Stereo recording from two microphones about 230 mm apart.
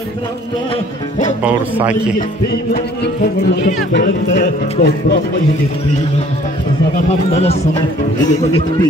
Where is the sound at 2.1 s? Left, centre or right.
Left.